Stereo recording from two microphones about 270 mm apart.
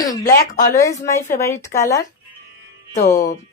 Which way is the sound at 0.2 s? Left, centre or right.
Left.